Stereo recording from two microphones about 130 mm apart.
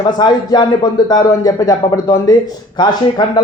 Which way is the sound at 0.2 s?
35° left (ahead or behind).